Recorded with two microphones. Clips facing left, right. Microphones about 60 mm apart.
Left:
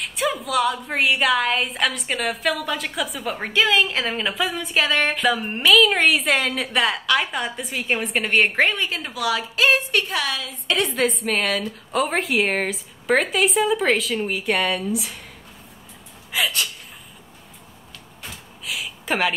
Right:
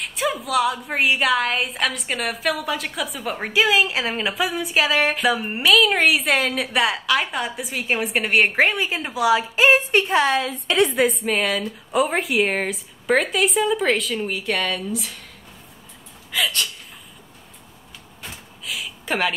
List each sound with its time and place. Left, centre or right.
0.0 s a woman's voice: centre
8.8 s a woman's voice: centre; by 10.5 s right
11.0 s a woman's voice: centre
16.3 s speech: centre
18.2 s a sound: centre